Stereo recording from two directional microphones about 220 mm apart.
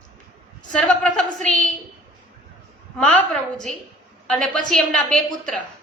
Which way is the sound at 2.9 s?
5° left (ahead or behind).